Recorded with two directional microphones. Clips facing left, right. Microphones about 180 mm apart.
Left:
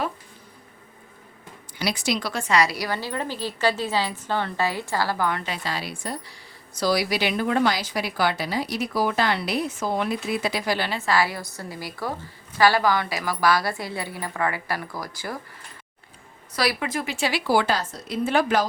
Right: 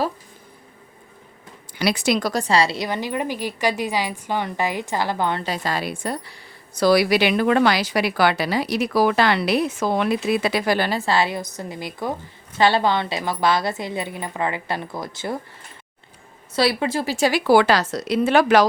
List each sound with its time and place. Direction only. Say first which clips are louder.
1.8 s a woman's voice: right 5 dB; 65° right (ahead or behind); by 5.5 s 30° right (ahead or behind)
5.6 s a woman's voice: right 5 dB; 50° right (ahead or behind)
11.0 s a woman's voice: right 2 dB; 25° right (ahead or behind)
16.6 s speech: right 5 dB; 30° right (ahead or behind)
17.4 s speech: right 6 dB; 75° right (ahead or behind)